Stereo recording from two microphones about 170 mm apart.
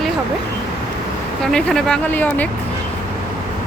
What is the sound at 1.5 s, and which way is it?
Speech, 5° left (ahead or behind).